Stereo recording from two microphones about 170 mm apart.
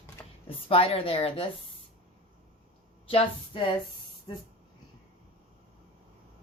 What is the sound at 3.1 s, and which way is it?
A woman's voice, 35° left (ahead or behind).